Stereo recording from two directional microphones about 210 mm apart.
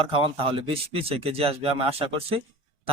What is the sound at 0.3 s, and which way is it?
A man's voice, 25° right (ahead or behind).